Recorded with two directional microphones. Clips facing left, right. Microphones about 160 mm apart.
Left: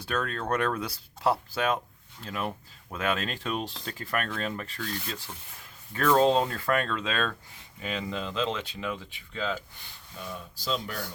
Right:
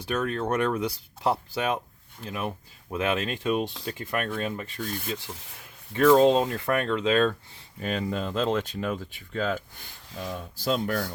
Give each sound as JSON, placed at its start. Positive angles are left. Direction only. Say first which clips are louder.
{"t": 0.0, "sound": "speech", "louder": "right 4 dB", "side_deg": -20}
{"t": 7.8, "sound": "speech", "louder": "right 4 dB", "side_deg": -45}